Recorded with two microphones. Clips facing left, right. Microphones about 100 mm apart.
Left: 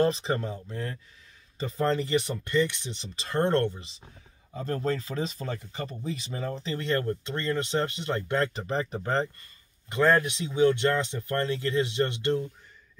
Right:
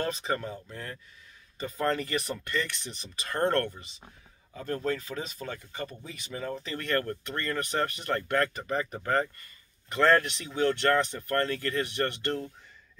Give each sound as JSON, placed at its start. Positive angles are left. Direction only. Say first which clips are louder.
{"t": 0.0, "sound": "speech", "louder": "left 5 dB", "side_deg": 30}
{"t": 9.9, "sound": "speech", "louder": "left 1 dB", "side_deg": 15}